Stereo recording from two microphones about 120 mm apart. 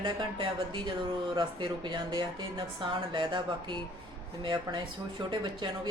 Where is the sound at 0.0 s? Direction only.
45° right (ahead or behind).